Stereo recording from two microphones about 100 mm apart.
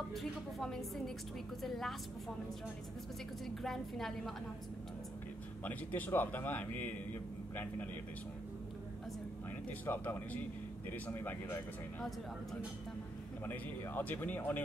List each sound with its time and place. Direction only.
0.1 s speech: centre (ahead or behind)
3.4 s speech: centre (ahead or behind)
5.6 s a man's voice: 15° left (ahead or behind)
9.7 s a man's voice: 15° left (ahead or behind)
13.5 s speech: 20° left (ahead or behind)